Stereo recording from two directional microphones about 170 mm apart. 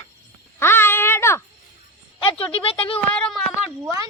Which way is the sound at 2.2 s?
30° left (ahead or behind).